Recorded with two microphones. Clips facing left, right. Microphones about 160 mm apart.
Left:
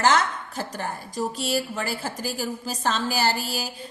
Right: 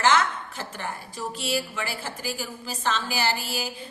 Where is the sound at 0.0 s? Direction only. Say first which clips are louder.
Left 1 dB; 40° left (ahead or behind).